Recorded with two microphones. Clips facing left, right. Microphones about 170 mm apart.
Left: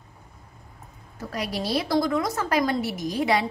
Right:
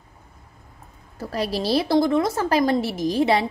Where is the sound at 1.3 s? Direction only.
30° right (ahead or behind).